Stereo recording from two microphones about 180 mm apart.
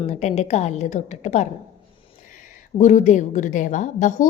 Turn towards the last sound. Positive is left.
turn(degrees=45)  # may be behind; listen again after turning